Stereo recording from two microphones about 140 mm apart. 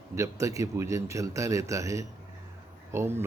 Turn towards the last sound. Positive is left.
turn(degrees=-15)  # may be behind; listen again after turning